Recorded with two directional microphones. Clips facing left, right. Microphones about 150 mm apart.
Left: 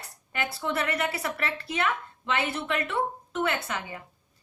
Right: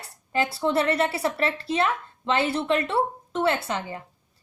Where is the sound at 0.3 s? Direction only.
30° right (ahead or behind).